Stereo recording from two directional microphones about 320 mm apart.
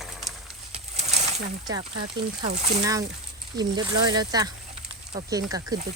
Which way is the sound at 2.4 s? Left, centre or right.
Centre.